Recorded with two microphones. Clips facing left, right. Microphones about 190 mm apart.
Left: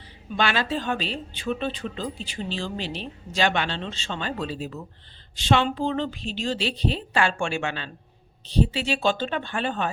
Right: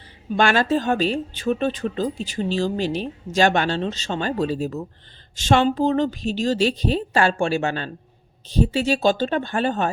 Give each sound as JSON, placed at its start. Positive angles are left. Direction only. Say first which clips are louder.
{"t": 0.3, "sound": "speech", "louder": "right 6 dB", "side_deg": -45}